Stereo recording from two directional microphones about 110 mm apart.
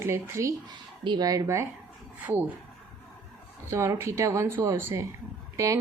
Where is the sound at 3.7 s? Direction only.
25° right (ahead or behind).